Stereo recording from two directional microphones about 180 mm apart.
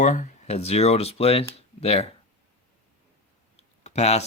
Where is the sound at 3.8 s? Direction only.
35° left (ahead or behind).